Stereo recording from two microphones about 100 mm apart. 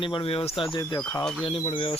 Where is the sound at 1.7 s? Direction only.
60° left (ahead or behind).